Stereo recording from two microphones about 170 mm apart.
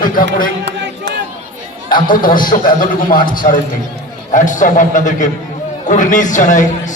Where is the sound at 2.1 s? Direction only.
50° left (ahead or behind).